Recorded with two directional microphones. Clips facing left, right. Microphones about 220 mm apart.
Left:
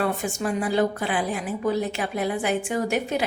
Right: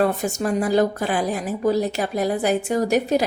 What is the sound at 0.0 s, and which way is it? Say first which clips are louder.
A woman's voice: right 4 dB; 40° right (ahead or behind).